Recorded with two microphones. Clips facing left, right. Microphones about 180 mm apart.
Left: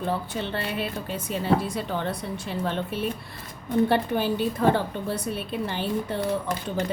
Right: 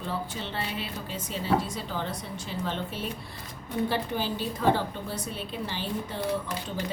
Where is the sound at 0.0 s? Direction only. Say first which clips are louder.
Left 5 dB; 60° left (ahead or behind).